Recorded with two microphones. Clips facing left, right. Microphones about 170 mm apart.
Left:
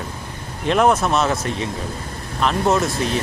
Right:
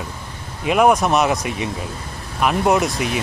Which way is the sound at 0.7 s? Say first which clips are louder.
Right 2 dB; 10° right (ahead or behind).